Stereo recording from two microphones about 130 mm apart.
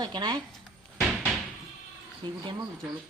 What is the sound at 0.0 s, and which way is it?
Speech, 35° right (ahead or behind).